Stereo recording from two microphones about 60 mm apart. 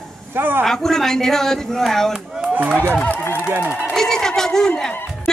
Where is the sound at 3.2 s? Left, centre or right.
Left.